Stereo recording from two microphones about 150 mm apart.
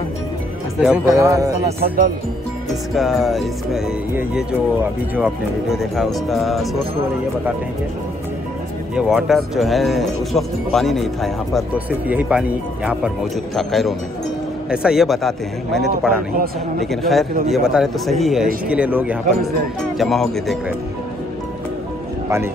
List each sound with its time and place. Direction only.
0.7 s speech: 5° right (ahead or behind)
1.1 s speech: 20° right (ahead or behind)
1.8 s speech: 70° right (ahead or behind)
3.0 s speech: centre (ahead or behind)
8.9 s speech: centre (ahead or behind)
11.7 s speech: 10° right (ahead or behind)
20.0 s speech: centre (ahead or behind)